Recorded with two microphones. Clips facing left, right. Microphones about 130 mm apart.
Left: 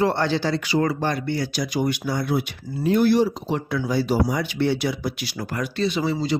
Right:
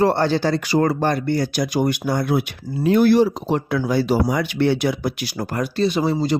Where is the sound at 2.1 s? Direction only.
55° right (ahead or behind).